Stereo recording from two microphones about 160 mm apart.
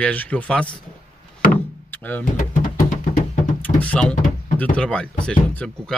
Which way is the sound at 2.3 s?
60° left (ahead or behind).